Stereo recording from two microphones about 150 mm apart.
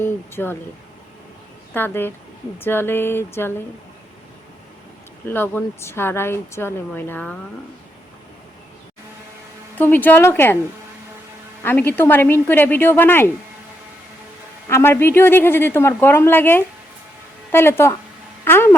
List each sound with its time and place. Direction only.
0.0 s speech: 15° left (ahead or behind)
1.7 s speech: 15° left (ahead or behind)
5.3 s speech: 15° left (ahead or behind)
9.7 s speech: 10° left (ahead or behind)
11.6 s speech: 15° left (ahead or behind)
14.7 s speech: 15° left (ahead or behind)